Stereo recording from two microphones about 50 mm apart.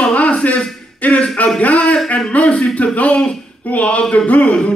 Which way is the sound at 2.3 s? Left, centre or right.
Left.